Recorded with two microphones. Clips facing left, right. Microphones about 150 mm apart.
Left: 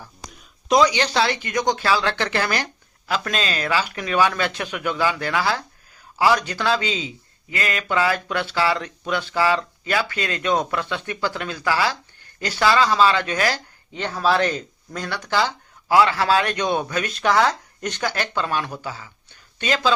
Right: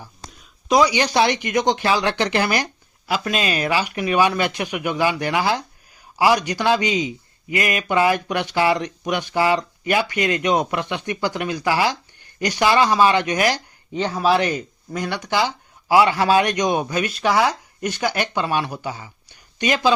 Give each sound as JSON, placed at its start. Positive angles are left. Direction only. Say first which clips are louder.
{"t": 0.7, "sound": "speech", "louder": "right 1 dB", "side_deg": -10}